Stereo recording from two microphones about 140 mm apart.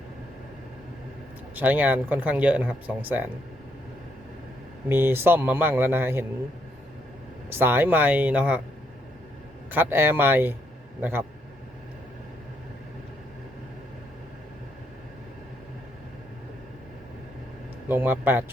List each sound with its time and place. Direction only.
1.5 s speech: 10° right (ahead or behind)
4.9 s speech: 15° right (ahead or behind)
7.5 s speech: 15° right (ahead or behind)
9.7 s speech: 15° right (ahead or behind)
17.8 s speech: 15° right (ahead or behind)